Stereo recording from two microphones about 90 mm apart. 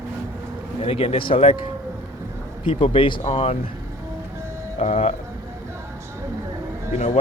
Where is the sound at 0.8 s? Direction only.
90° left.